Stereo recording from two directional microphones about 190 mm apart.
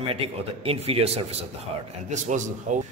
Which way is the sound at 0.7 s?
30° right (ahead or behind).